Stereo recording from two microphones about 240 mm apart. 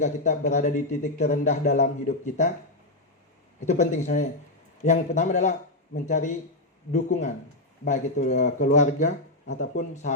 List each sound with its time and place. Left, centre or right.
0.0 s speech: left
3.7 s speech: left